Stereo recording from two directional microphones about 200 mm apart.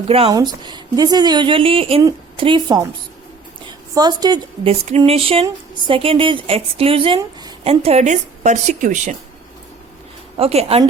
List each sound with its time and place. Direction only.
0.1 s a woman's voice: 30° right (ahead or behind)
3.9 s a woman's voice: 20° right (ahead or behind); by 9.1 s 40° right (ahead or behind)
10.3 s a woman's voice: 30° right (ahead or behind)